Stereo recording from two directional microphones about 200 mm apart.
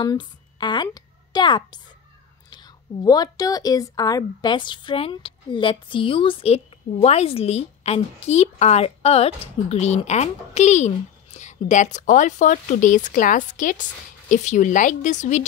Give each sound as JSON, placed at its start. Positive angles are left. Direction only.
{"t": 0.0, "sound": "a woman's voice", "side_deg": 20}